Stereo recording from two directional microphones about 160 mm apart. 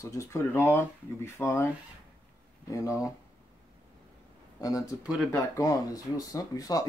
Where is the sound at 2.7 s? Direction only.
20° left (ahead or behind).